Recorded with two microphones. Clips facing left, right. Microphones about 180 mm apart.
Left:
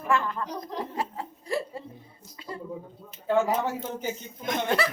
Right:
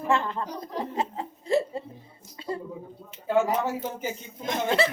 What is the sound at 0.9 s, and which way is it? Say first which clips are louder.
Laughter: right 2 dB; 20° right (ahead or behind).